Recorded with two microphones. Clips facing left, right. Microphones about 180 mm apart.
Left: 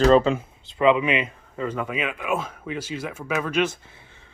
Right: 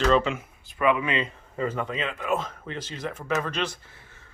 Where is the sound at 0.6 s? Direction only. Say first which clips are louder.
Left 4 dB; 25° left (ahead or behind).